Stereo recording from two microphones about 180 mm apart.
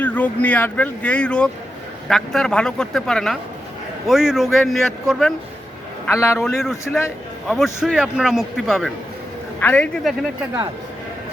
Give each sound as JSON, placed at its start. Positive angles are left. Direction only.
{"t": 0.0, "sound": "a man's voice", "side_deg": 10}
{"t": 6.1, "sound": "speech", "side_deg": 15}
{"t": 6.4, "sound": "a man's voice", "side_deg": 0}